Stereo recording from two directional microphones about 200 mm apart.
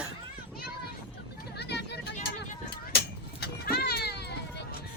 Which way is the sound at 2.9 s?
50° left (ahead or behind).